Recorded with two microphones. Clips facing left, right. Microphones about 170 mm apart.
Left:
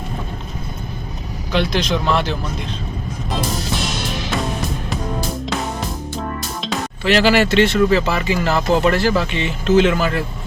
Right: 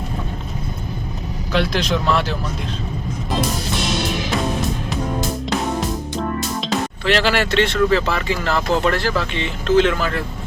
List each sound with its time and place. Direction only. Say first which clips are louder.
1.5 s speech: left 1 dB; centre (ahead or behind)
6.6 s speech: right 2 dB; centre (ahead or behind)